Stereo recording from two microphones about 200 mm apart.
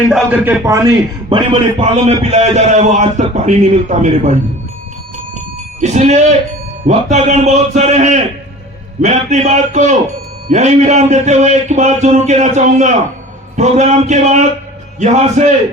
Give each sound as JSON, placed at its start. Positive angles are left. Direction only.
{"t": 0.1, "sound": "a man's voice", "side_deg": -10}
{"t": 1.5, "sound": "a man's voice", "side_deg": -35}
{"t": 5.8, "sound": "a man's voice", "side_deg": -35}